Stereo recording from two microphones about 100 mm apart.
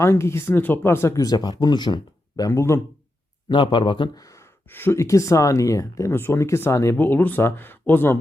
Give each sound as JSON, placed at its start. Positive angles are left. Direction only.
{"t": 0.0, "sound": "speech", "side_deg": 25}
{"t": 2.5, "sound": "speech", "side_deg": 30}
{"t": 3.5, "sound": "speech", "side_deg": 55}
{"t": 4.2, "sound": "gasp", "side_deg": 35}
{"t": 4.7, "sound": "speech", "side_deg": 25}